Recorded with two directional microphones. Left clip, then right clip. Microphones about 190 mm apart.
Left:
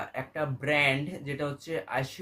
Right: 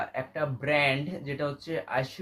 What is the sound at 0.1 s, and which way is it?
Speech, 10° left (ahead or behind).